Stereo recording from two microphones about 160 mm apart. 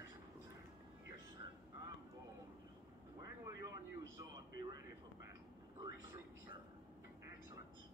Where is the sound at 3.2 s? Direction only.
20° right (ahead or behind).